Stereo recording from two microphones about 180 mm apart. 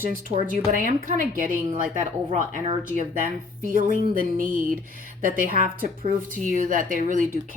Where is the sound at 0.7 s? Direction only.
50° right (ahead or behind).